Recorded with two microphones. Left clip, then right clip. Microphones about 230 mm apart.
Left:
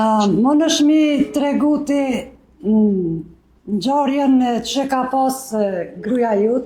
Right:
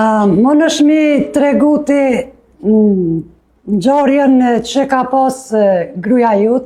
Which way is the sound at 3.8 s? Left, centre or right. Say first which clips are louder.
Right 7 dB; right.